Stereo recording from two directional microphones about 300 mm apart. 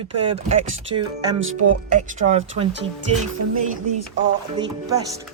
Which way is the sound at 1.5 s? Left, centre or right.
Right.